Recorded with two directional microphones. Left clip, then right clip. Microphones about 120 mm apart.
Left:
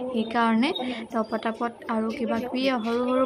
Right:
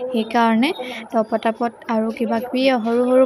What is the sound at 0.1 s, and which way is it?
A woman's voice, 55° right (ahead or behind).